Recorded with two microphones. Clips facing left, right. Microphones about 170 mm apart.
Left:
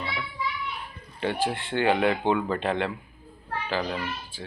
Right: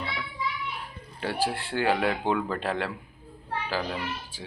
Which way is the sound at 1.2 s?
5° right (ahead or behind).